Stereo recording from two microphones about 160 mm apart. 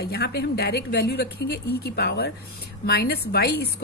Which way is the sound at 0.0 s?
90° left.